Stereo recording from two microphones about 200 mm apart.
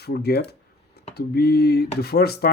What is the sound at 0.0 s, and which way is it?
Speech, 55° left (ahead or behind).